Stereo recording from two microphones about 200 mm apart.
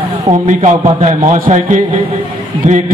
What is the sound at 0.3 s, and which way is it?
A man's voice, 35° right (ahead or behind).